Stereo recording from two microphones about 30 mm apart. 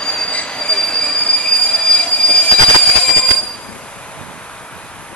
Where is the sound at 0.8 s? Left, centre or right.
Left.